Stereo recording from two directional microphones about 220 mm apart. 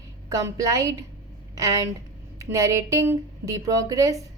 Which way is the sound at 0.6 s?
15° right (ahead or behind).